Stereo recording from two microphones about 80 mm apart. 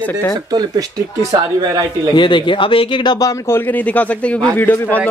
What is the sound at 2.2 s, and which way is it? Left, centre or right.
Speech, left.